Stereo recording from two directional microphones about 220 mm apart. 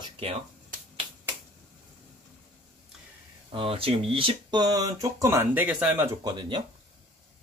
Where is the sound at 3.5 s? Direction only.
25° right (ahead or behind).